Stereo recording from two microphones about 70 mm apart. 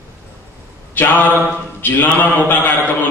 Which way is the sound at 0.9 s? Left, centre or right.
Left.